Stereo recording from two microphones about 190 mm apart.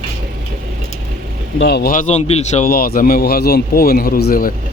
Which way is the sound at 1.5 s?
60° left (ahead or behind).